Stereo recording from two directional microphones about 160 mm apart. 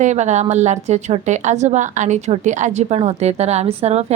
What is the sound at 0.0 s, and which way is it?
A woman's voice, 45° right (ahead or behind).